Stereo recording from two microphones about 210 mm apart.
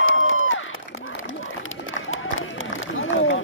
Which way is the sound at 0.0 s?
70° left (ahead or behind).